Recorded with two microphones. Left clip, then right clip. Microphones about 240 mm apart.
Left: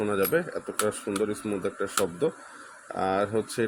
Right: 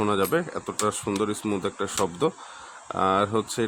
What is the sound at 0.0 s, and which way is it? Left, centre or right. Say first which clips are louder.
Speech: right 2 dB; centre.